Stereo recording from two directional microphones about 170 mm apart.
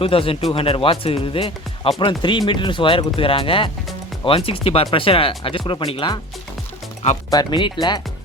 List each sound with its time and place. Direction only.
0.0 s speech: 35° left (ahead or behind)
7.3 s speech: 25° left (ahead or behind)